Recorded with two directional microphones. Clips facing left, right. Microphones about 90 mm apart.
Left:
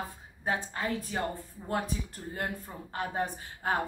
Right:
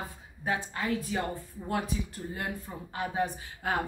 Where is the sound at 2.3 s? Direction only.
45° left (ahead or behind).